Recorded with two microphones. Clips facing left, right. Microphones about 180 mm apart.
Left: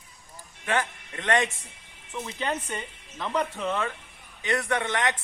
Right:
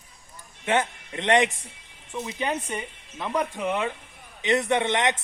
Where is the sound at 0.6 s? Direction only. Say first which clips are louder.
Right 3 dB; 20° right (ahead or behind).